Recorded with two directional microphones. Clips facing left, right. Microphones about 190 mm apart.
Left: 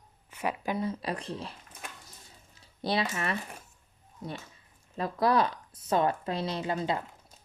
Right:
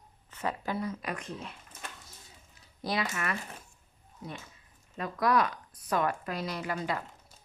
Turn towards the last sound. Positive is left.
turn(degrees=25)  # may be behind; listen again after turning